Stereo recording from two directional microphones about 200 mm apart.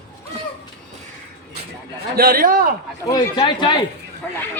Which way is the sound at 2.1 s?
45° right (ahead or behind).